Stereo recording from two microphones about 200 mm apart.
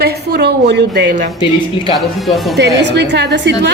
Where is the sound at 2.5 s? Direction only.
60° right (ahead or behind).